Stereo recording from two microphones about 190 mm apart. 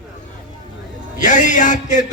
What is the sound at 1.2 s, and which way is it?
Music, 40° left (ahead or behind).